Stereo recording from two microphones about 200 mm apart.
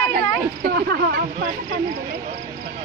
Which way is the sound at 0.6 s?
50° right (ahead or behind).